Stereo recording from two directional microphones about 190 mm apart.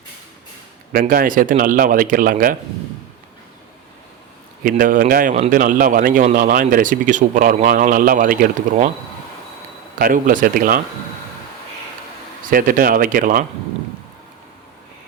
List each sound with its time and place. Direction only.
0.9 s speech: 45° right (ahead or behind)
4.6 s speech: 45° right (ahead or behind)
10.0 s speech: 45° right (ahead or behind)
12.5 s speech: 45° right (ahead or behind)